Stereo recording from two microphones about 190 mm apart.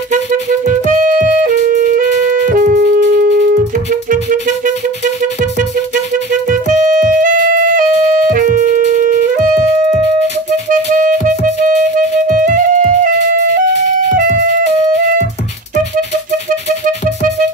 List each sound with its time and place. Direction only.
0.1 s music: 45° right (ahead or behind); by 3.4 s 60° right (ahead or behind)
4.1 s music: 45° right (ahead or behind)
6.5 s music: 40° right (ahead or behind)
10.7 s music: 40° right (ahead or behind)